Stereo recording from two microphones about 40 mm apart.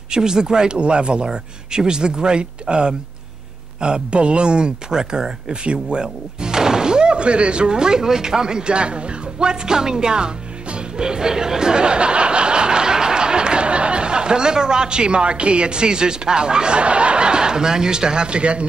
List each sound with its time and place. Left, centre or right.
0.1 s speech: centre